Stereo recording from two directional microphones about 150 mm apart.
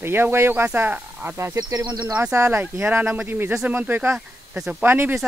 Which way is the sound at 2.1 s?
15° right (ahead or behind).